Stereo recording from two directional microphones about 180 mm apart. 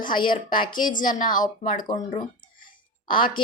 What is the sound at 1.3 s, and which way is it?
Speech, 45° left (ahead or behind).